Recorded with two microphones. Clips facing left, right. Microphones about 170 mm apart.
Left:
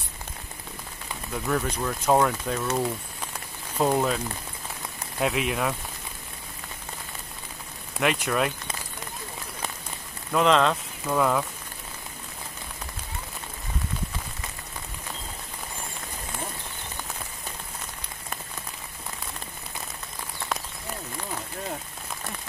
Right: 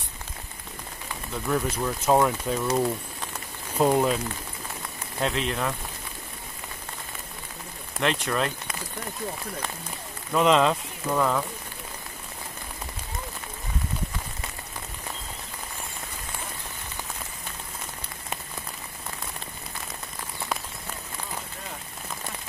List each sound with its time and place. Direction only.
1.5 s speech: 5° right (ahead or behind)
5.2 s speech: 10° left (ahead or behind)
8.0 s speech: 10° left (ahead or behind)
10.3 s speech: 5° right (ahead or behind)